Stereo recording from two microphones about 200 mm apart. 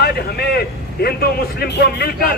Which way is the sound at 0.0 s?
50° left (ahead or behind).